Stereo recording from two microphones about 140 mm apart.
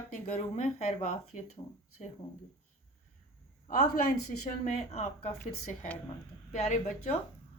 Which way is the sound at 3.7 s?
80° left.